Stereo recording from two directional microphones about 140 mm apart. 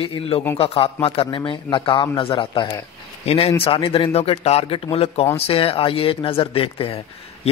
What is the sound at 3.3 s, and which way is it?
Speech, 50° left (ahead or behind).